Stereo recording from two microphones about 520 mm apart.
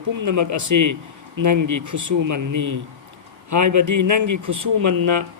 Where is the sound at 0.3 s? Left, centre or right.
Right.